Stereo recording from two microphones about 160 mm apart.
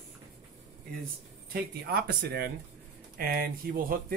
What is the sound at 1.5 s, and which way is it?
Speech, 70° right (ahead or behind).